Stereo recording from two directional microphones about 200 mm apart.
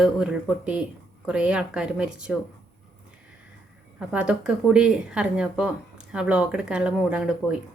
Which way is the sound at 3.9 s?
5° right (ahead or behind).